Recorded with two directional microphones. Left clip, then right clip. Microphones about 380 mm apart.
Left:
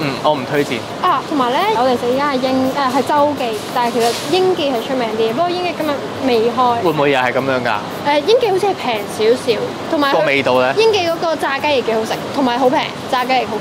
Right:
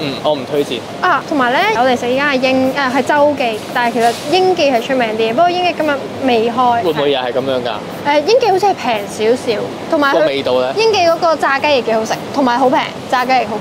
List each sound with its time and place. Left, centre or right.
1.0 s a woman's voice: right
7.0 s speech: left
8.1 s a woman's voice: right
10.2 s speech: left
10.8 s a woman's voice: right